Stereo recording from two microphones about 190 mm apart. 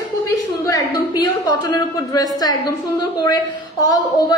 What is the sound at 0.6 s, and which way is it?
A woman's voice, 20° left (ahead or behind).